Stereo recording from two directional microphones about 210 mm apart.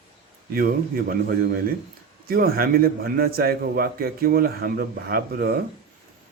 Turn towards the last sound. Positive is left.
turn(degrees=-45)  # may be behind; listen again after turning